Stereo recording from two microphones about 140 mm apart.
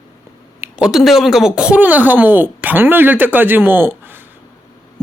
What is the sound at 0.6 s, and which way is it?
Speech, 5° right (ahead or behind).